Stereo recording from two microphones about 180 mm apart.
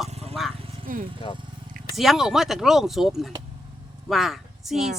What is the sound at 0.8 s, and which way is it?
Speech, 50° right (ahead or behind).